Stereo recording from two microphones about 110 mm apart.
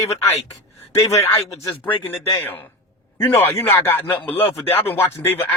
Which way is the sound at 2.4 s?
20° left (ahead or behind).